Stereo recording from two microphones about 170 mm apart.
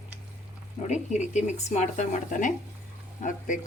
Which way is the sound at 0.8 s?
45° left (ahead or behind).